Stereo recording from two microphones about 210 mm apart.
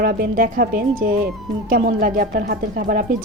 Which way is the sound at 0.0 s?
45° right (ahead or behind).